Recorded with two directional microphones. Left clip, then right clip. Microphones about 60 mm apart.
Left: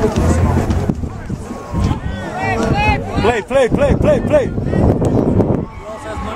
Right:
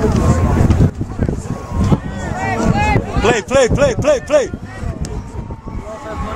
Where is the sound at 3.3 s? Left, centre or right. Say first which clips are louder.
Right 2 dB; right.